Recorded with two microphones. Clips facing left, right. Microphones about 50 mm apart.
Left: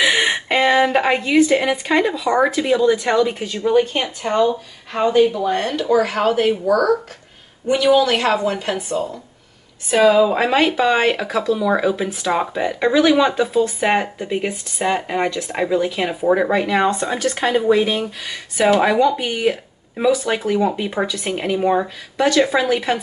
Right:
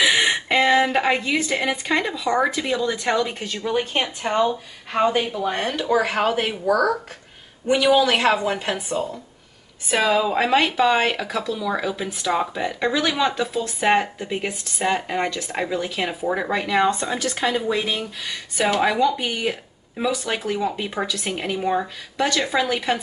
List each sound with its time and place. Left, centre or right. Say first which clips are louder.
0.0 s speech: left 2 dB; centre
4.2 s a woman's voice: left 5 dB; centre
9.8 s speech: left 6 dB; centre